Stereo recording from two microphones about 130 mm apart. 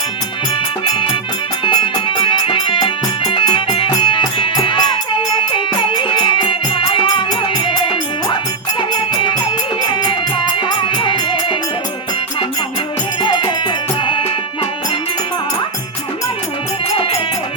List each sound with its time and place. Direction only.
1.6 s music: 40° left (ahead or behind)
13.2 s music: 40° left (ahead or behind)
16.9 s music: 45° left (ahead or behind)